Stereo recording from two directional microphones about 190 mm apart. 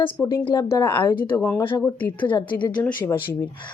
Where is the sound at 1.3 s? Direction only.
10° left (ahead or behind).